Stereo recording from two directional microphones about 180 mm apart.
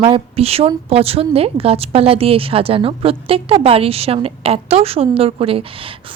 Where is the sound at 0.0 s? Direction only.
30° right (ahead or behind).